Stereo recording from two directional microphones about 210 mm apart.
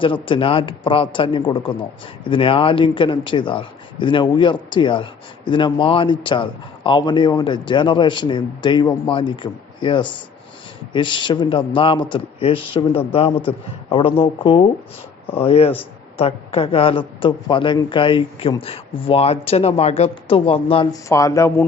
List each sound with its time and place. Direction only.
0.0 s speech: 25° left (ahead or behind)
21.1 s speech: 15° left (ahead or behind)